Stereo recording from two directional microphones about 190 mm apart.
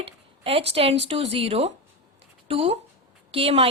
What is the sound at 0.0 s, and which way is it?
A woman's voice, 30° right (ahead or behind).